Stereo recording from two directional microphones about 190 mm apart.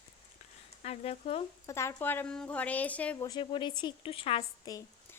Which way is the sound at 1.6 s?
15° left (ahead or behind).